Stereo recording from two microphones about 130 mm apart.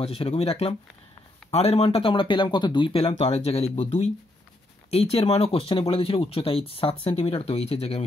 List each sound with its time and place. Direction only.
0.0 s speech: 50° left (ahead or behind)